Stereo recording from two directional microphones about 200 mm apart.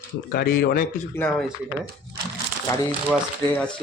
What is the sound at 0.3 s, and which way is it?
Speech, 50° left (ahead or behind).